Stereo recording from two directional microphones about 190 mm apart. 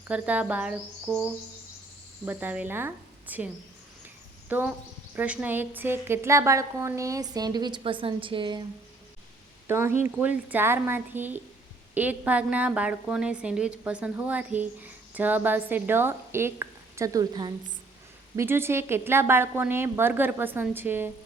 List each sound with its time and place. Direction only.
0.1 s a woman's voice: 5° right (ahead or behind); by 8.6 s 25° right (ahead or behind)
9.6 s a woman's voice: 10° right (ahead or behind)